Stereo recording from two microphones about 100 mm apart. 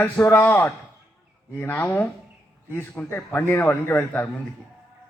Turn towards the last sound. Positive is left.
turn(degrees=25)  # may be behind; listen again after turning